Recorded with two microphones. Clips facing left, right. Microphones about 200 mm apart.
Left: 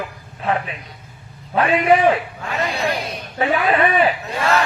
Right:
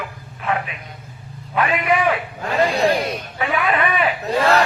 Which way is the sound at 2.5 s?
30° right (ahead or behind).